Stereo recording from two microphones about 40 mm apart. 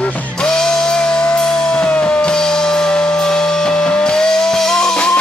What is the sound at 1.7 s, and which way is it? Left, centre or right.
Music, left.